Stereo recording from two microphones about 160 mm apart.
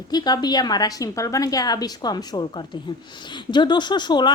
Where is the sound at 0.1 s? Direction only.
25° left (ahead or behind).